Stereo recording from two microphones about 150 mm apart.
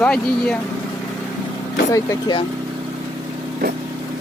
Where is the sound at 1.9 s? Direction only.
25° left (ahead or behind).